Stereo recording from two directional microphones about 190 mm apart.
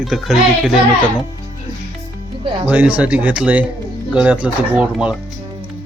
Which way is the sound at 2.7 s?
5° right (ahead or behind).